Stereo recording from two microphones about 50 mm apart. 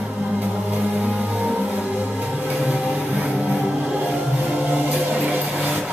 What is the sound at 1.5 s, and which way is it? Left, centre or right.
Music, right.